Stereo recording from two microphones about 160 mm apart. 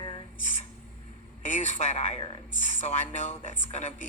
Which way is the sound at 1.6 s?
45° left (ahead or behind).